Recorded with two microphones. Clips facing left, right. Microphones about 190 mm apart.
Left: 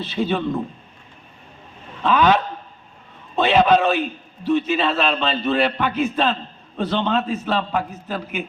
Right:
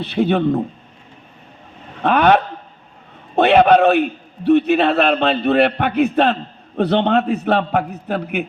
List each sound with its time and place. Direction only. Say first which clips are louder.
0.0 s a man's voice: right 5 dB; 60° right (ahead or behind)
2.0 s a sound: right 3 dB; 60° right (ahead or behind)
3.3 s a man's voice: right 4 dB; 60° right (ahead or behind)